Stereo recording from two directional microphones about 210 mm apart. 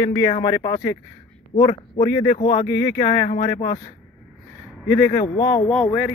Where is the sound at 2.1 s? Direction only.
15° left (ahead or behind).